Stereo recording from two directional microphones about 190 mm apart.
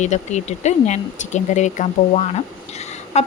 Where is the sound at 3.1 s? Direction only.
35° left (ahead or behind).